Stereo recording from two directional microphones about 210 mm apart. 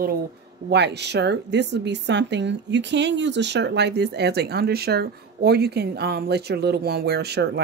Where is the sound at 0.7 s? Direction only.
55° right (ahead or behind).